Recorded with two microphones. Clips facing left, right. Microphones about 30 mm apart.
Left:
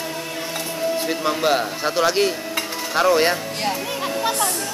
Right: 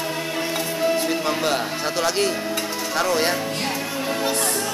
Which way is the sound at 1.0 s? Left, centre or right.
Centre.